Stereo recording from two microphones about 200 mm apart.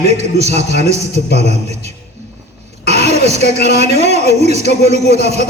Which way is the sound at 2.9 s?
35° right (ahead or behind).